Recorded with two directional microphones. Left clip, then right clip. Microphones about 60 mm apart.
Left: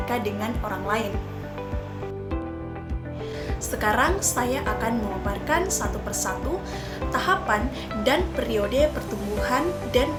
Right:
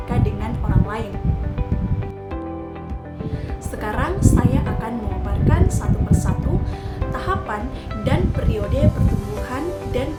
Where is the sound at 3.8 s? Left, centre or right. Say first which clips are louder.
Left 2 dB; right.